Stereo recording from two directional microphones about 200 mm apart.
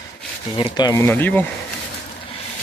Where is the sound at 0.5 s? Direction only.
25° left (ahead or behind).